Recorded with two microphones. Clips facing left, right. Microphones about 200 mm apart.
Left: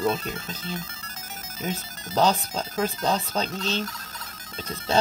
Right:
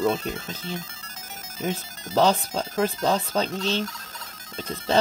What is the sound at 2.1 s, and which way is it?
Speech, 60° right (ahead or behind).